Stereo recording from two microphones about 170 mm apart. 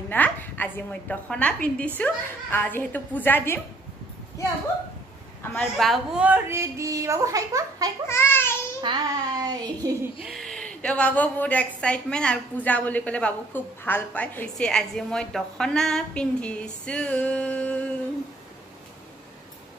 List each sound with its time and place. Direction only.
0.1 s a woman's voice: 10° left (ahead or behind)
5.5 s speech: 5° left (ahead or behind); by 7.9 s 20° right (ahead or behind)
8.1 s child singing: 15° left (ahead or behind)
8.8 s speech: 25° right (ahead or behind)
10.2 s a woman's voice: centre (ahead or behind)